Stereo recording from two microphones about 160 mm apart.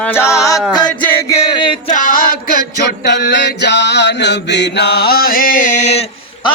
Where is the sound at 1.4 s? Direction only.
30° left (ahead or behind).